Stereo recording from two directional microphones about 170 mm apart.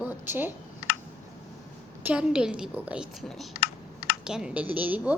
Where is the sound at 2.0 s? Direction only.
5° right (ahead or behind).